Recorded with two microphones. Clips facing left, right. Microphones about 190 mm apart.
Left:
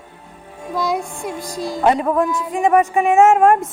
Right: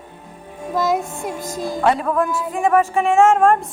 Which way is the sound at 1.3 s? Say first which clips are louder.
Even; 20° right (ahead or behind).